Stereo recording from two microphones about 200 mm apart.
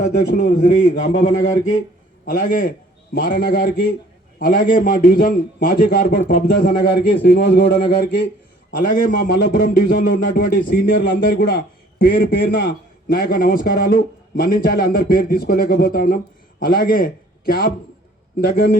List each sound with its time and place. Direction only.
0.1 s a man's voice: 55° left (ahead or behind)
0.6 s a man's voice: 40° left (ahead or behind)